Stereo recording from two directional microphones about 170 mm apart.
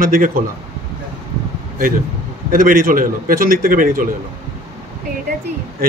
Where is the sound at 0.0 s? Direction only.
55° right (ahead or behind).